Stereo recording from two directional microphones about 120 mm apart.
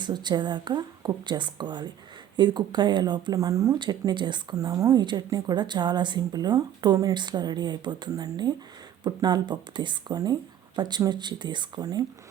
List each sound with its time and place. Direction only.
0.0 s speech: 40° right (ahead or behind)